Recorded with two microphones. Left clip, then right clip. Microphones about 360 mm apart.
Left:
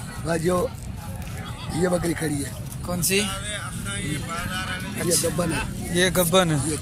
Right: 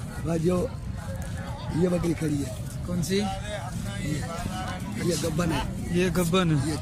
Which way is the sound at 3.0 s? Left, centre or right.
Centre.